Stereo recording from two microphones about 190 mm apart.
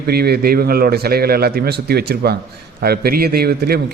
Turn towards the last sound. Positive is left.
turn(degrees=-55)  # may be behind; listen again after turning